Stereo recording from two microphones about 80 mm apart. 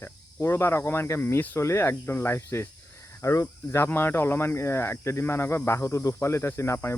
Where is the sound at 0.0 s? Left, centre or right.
Left.